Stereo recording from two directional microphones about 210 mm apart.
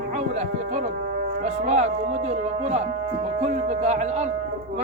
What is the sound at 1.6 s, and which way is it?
Speech, 30° right (ahead or behind).